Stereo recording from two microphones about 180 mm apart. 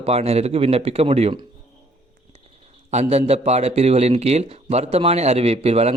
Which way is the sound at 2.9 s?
35° right (ahead or behind).